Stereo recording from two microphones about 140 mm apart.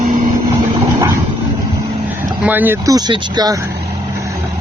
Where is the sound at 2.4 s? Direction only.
15° right (ahead or behind).